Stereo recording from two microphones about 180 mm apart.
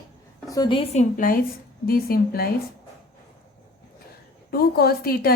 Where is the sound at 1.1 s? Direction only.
50° left (ahead or behind).